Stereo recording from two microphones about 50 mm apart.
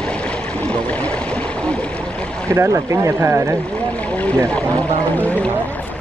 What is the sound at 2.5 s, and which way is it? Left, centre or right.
Speech, right.